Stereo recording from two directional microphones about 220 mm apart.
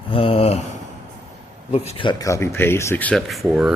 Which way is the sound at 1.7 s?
25° left (ahead or behind).